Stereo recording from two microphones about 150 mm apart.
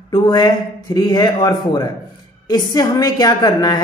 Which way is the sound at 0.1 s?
30° left (ahead or behind).